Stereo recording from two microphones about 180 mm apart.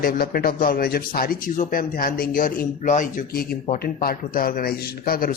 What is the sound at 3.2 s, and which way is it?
Speech, 55° left (ahead or behind).